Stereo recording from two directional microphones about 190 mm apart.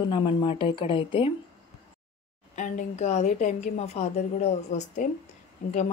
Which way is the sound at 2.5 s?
40° left (ahead or behind).